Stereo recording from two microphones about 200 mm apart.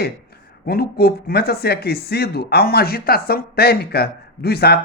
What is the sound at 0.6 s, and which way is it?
Speech, 50° left (ahead or behind).